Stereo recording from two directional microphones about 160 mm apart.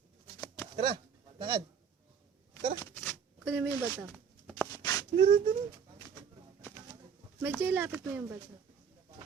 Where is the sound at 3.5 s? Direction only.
10° right (ahead or behind).